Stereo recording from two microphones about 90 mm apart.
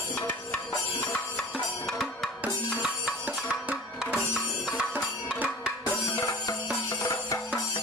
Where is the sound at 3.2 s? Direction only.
15° right (ahead or behind).